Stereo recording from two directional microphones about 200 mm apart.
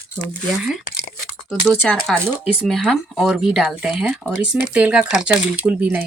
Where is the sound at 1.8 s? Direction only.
5° left (ahead or behind).